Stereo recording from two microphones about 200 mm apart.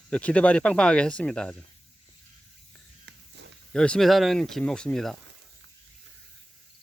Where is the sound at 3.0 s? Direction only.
65° right (ahead or behind).